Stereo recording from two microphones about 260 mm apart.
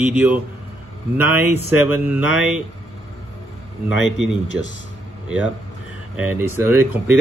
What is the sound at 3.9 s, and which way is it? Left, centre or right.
Speech, left.